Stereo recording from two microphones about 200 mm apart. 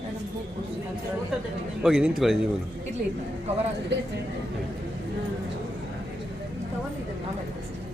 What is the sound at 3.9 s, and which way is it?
Speech, 60° right (ahead or behind).